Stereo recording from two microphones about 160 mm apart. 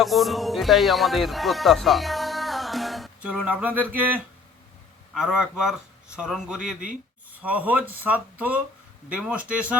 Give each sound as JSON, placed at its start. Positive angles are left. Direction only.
{"t": 0.0, "sound": "a man's voice", "side_deg": 0}